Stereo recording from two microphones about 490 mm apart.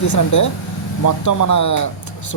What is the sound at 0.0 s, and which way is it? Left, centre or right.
Speech, left.